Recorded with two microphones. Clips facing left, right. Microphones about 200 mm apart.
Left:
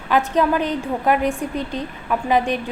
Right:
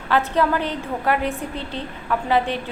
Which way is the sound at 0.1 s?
15° left (ahead or behind).